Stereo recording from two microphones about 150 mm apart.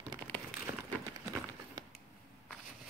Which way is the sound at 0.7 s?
30° right (ahead or behind).